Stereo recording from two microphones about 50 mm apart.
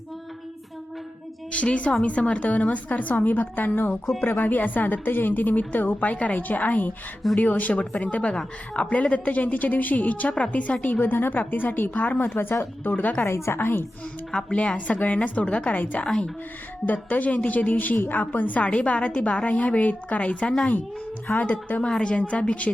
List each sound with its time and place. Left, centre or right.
1.5 s a woman's voice: left
6.1 s a woman's voice: left
8.3 s a woman's voice: centre
11.0 s a woman's voice: left
12.8 s a woman's voice: left
13.2 s a woman's voice: left
13.6 s speech: left
14.3 s a woman's voice: centre
14.8 s a woman's voice: left
16.0 s a woman's voice: centre
16.8 s a woman's voice: left
18.7 s a woman's voice: left
21.8 s a woman's voice: centre